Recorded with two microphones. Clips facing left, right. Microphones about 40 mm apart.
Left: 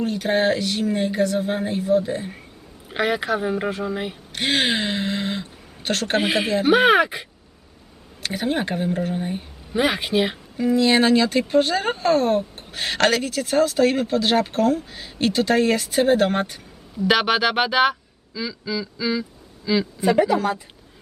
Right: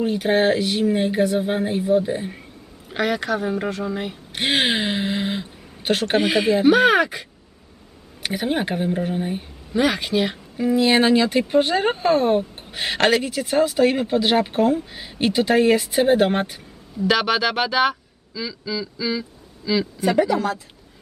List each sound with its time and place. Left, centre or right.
0.0 s speech: centre
2.9 s speech: centre
4.3 s speech: centre
6.1 s speech: centre
8.2 s speech: centre
9.7 s speech: centre
10.8 s speech: centre
17.1 s speech: centre